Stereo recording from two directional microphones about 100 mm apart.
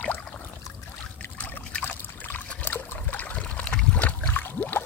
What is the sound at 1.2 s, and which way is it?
Trickle, 20° left (ahead or behind).